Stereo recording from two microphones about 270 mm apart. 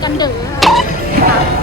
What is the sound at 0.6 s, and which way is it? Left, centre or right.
Music, centre.